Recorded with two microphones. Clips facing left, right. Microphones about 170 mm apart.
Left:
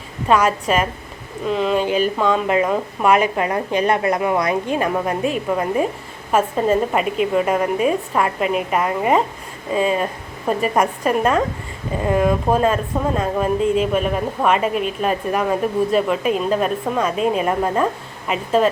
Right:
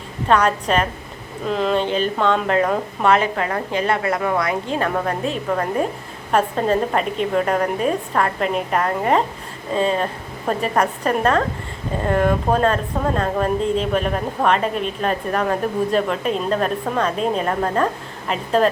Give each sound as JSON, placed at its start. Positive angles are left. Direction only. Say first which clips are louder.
{"t": 0.3, "sound": "a woman's voice", "louder": "left 1 dB", "side_deg": 10}